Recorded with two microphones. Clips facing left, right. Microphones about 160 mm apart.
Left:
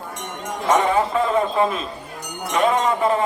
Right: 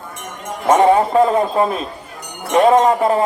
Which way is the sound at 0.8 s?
35° right (ahead or behind).